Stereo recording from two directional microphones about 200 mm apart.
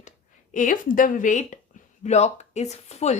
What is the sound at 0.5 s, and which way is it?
Speech, 40° left (ahead or behind).